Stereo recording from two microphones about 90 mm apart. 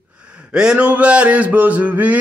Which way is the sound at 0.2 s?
10° right (ahead or behind).